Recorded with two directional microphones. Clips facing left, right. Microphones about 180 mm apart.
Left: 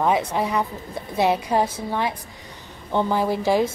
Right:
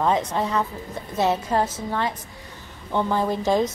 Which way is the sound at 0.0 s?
10° left (ahead or behind).